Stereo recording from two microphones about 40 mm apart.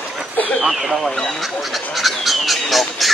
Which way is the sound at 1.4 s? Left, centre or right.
Centre.